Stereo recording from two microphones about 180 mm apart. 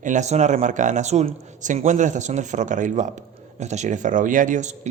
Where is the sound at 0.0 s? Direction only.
40° right (ahead or behind).